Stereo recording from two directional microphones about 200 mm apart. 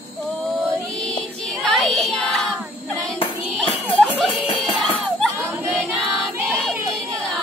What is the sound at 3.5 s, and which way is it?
Music, centre (ahead or behind).